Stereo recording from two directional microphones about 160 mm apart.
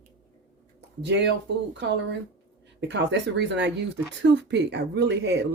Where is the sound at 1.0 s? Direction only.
90° right.